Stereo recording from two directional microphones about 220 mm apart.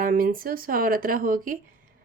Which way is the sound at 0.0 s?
40° right (ahead or behind).